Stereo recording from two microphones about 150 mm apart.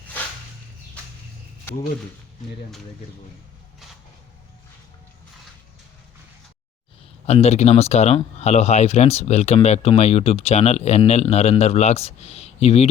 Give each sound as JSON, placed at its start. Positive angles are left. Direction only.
{"t": 7.3, "sound": "speech", "side_deg": 45}